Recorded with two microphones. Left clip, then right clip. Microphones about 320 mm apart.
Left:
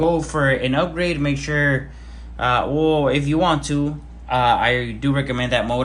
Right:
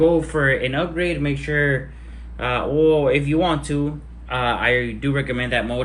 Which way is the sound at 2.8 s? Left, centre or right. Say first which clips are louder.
Right 7 dB; left.